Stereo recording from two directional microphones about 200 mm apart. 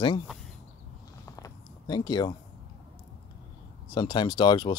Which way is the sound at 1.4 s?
20° left (ahead or behind).